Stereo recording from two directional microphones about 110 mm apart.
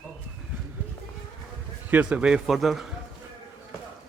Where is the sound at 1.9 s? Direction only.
10° right (ahead or behind).